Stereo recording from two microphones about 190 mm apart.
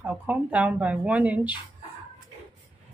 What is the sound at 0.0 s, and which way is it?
Speech, 5° right (ahead or behind).